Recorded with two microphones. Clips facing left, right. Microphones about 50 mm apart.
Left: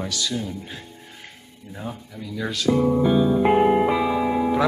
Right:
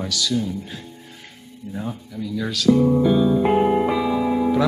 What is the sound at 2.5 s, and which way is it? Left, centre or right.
Speech, left.